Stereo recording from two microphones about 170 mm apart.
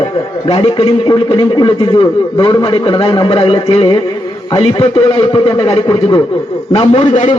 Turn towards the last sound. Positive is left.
turn(degrees=45)  # may be behind; listen again after turning